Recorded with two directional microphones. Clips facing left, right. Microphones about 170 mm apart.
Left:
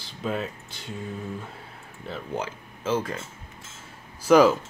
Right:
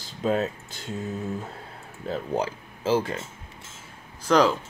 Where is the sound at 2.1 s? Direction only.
35° right (ahead or behind).